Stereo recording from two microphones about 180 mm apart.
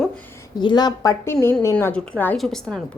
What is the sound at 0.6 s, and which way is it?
A woman's voice, 25° left (ahead or behind).